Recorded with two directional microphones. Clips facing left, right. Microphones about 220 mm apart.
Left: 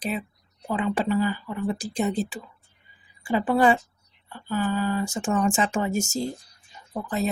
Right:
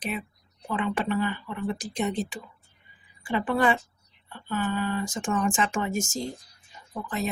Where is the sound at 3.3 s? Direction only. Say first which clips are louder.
Left 4 dB; 30° left (ahead or behind).